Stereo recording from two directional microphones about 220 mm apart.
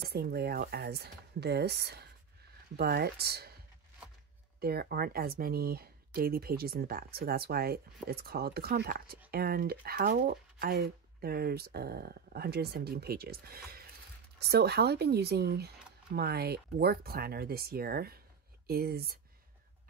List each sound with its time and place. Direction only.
0.1 s speech: 45° right (ahead or behind)
4.6 s speech: 45° right (ahead or behind)